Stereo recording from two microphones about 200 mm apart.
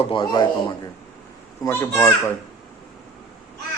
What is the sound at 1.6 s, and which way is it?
Speech, 10° left (ahead or behind).